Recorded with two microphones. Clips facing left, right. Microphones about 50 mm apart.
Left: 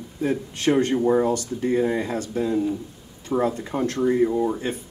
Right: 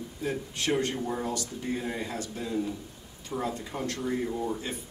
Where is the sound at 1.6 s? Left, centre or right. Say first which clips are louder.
Left 11 dB; left.